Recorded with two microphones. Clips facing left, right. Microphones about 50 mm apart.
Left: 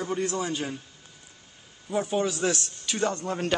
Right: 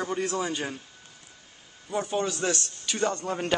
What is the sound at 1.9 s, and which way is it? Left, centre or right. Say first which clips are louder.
Speech: left 2 dB; centre.